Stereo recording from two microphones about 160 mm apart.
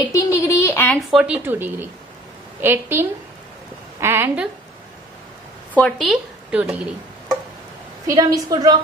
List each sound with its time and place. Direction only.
0.1 s a sound: 20° left (ahead or behind)
1.1 s speech: 10° right (ahead or behind)
5.8 s speech: 5° left (ahead or behind)
8.1 s a woman's voice: 20° right (ahead or behind)